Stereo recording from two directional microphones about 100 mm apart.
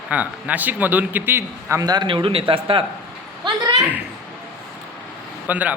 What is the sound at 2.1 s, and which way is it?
Speech, 65° right (ahead or behind).